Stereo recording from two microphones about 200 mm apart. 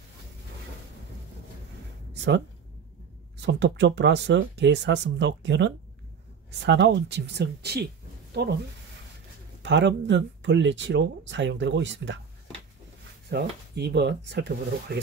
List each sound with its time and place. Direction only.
3.4 s speech: 60° right (ahead or behind)
9.6 s speech: 65° right (ahead or behind)
13.3 s speech: 55° right (ahead or behind)